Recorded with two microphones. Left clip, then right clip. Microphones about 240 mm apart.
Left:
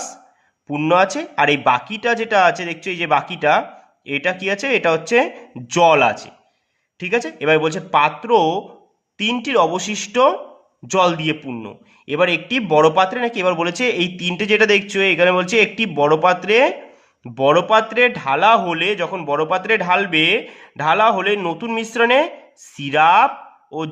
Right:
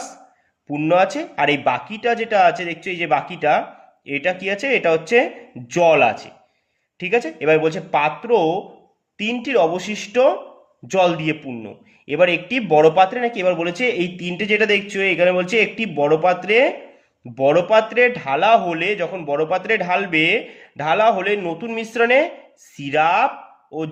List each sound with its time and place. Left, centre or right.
0.7 s a man's voice: left